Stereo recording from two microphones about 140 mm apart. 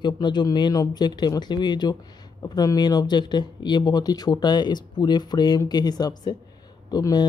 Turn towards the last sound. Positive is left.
turn(degrees=30)  # may be behind; listen again after turning